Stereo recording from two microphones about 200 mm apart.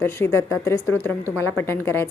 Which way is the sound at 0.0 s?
10° left (ahead or behind).